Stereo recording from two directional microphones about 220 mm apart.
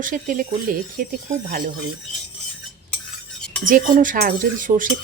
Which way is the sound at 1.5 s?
40° right (ahead or behind).